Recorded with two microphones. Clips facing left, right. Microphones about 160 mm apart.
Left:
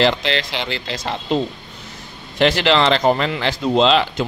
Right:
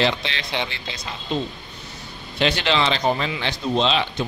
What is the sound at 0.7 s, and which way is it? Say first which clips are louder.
Speech: left 9 dB; 90° left.